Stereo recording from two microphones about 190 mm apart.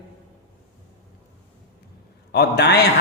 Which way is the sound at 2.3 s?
60° left (ahead or behind).